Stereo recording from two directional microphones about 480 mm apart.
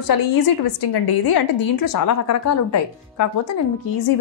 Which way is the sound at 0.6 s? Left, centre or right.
Left.